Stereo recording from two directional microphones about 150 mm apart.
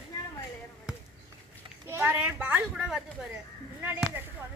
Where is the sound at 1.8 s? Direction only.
15° right (ahead or behind).